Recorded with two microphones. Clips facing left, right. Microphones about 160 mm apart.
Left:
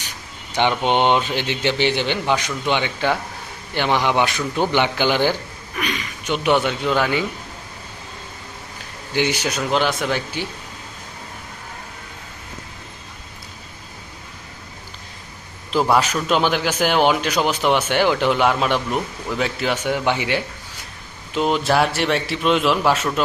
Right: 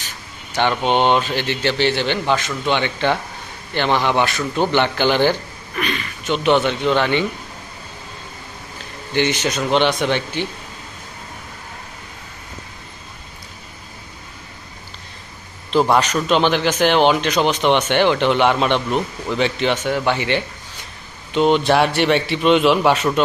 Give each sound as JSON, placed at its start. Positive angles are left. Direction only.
{"t": 0.5, "sound": "speech", "side_deg": 15}
{"t": 9.1, "sound": "speech", "side_deg": 10}
{"t": 15.7, "sound": "a man's voice", "side_deg": 5}